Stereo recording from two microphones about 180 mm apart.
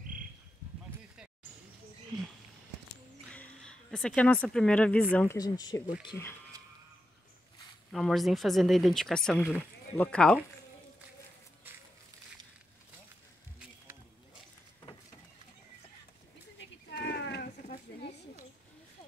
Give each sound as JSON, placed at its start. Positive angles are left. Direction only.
{"t": 3.3, "sound": "speech", "side_deg": 5}
{"t": 5.4, "sound": "speech", "side_deg": 20}
{"t": 7.9, "sound": "speech", "side_deg": 0}
{"t": 16.9, "sound": "a sound", "side_deg": 65}